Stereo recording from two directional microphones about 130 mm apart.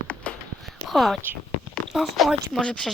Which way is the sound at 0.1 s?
10° left (ahead or behind).